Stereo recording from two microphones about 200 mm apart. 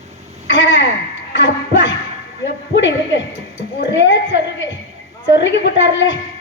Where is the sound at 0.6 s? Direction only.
65° left (ahead or behind).